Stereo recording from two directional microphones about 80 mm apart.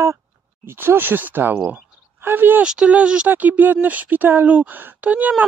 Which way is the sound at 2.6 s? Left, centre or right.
Centre.